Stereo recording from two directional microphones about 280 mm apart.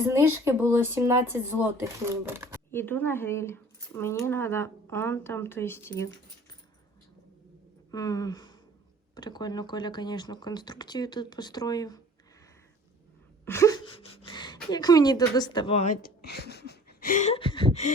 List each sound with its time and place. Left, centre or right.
0.1 s speech: centre
2.7 s speech: centre
7.9 s speech: centre
13.4 s speech: centre